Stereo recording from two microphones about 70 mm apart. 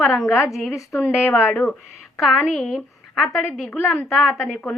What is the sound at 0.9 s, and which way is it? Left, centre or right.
Speech, left.